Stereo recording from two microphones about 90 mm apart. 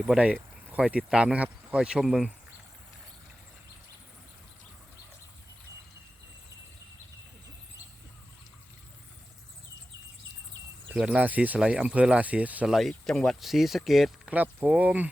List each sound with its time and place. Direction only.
0.0 s speech: 10° right (ahead or behind)
10.9 s speech: 10° right (ahead or behind)
13.1 s speech: 5° left (ahead or behind)
14.3 s speech: 20° right (ahead or behind)